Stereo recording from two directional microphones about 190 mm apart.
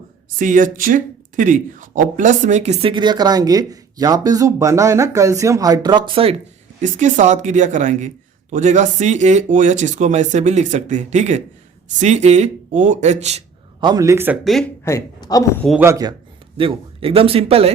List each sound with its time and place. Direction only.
0.3 s speech: 45° right (ahead or behind); by 6.3 s 25° right (ahead or behind)
6.8 s speech: 40° right (ahead or behind)
13.8 s a man's voice: 20° right (ahead or behind)
14.4 s speech: centre (ahead or behind)
14.8 s speech: 15° left (ahead or behind)
15.8 s a man's voice: 15° right (ahead or behind)
16.6 s speech: 30° right (ahead or behind)